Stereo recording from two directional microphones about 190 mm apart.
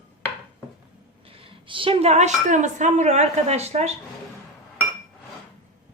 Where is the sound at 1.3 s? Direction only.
30° right (ahead or behind).